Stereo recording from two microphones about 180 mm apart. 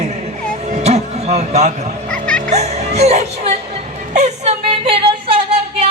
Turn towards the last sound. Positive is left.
turn(degrees=-30)  # may be behind; listen again after turning